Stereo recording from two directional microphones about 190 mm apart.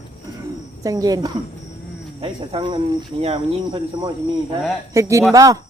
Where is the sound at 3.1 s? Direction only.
35° right (ahead or behind).